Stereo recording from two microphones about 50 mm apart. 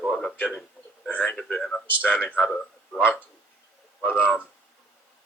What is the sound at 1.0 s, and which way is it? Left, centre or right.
Speech, left.